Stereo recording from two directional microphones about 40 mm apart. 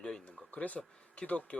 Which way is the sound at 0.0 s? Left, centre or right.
Centre.